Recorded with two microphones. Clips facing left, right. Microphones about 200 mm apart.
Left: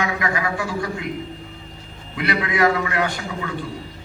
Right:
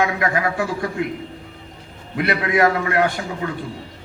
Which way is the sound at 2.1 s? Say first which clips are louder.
Right 3 dB; 50° right (ahead or behind).